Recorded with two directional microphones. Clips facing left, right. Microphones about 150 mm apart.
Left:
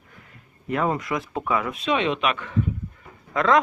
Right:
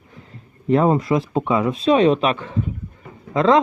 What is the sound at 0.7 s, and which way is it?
Speech, 30° right (ahead or behind).